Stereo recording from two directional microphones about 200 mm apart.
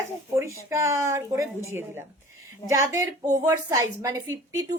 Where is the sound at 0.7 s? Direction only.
15° right (ahead or behind).